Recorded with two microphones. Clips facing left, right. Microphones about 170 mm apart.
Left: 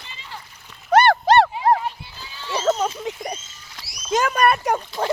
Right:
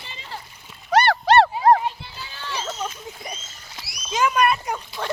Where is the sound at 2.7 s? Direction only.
55° left (ahead or behind).